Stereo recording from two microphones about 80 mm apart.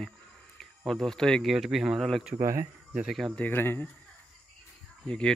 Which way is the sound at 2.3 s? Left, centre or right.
Right.